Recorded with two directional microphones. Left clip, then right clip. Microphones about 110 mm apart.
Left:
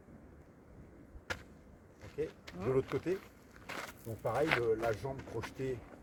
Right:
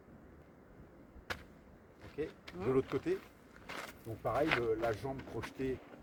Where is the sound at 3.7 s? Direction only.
90° left.